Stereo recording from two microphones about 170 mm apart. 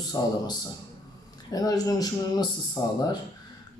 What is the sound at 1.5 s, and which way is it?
A man's voice, 20° left (ahead or behind).